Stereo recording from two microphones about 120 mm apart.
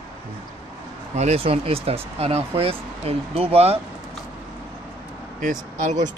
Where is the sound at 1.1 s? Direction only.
65° right (ahead or behind).